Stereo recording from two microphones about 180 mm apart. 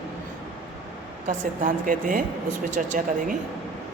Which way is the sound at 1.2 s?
50° right (ahead or behind).